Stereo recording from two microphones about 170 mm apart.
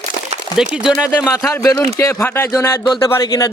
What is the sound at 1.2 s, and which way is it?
Speech, 15° left (ahead or behind).